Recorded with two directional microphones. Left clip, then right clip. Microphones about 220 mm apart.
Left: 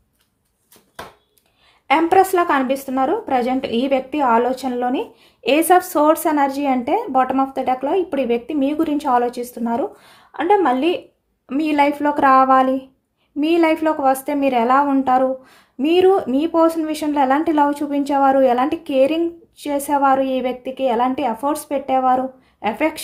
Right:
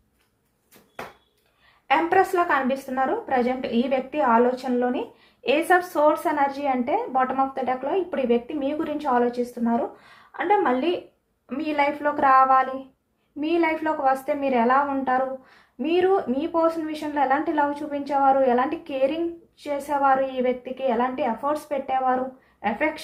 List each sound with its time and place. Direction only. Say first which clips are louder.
1.9 s a woman's voice: left 6 dB; 50° left (ahead or behind)